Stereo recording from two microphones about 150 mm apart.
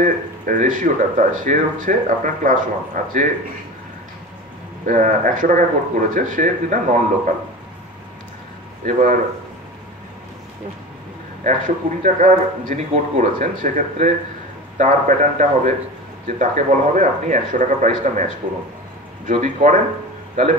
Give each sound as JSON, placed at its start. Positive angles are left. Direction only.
{"t": 0.0, "sound": "speech", "side_deg": -60}
{"t": 4.8, "sound": "speech", "side_deg": -60}
{"t": 8.8, "sound": "speech", "side_deg": -60}
{"t": 11.4, "sound": "speech", "side_deg": -60}
{"t": 19.3, "sound": "speech", "side_deg": -55}